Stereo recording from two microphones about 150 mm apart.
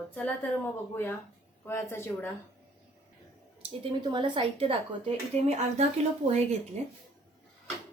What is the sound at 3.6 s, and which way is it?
Speech, 30° right (ahead or behind).